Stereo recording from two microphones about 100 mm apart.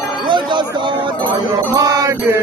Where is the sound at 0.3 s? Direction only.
50° right (ahead or behind).